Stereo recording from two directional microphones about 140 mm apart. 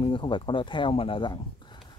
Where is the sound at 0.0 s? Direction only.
35° left (ahead or behind).